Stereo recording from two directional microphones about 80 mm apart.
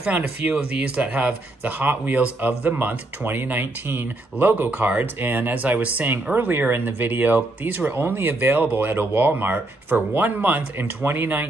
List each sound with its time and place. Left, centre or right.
0.0 s speech: centre